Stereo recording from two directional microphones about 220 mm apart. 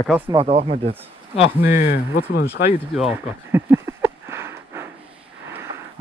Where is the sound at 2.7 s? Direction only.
5° right (ahead or behind).